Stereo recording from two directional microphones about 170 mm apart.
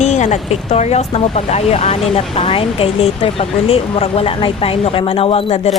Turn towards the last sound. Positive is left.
turn(degrees=35)  # may be behind; listen again after turning